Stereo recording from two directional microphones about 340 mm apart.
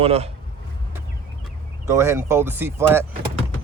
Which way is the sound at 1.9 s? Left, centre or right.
Centre.